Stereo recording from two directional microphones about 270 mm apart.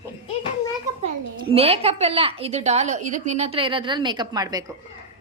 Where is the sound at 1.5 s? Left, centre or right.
Right.